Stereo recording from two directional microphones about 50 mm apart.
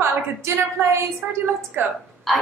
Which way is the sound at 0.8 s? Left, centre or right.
Right.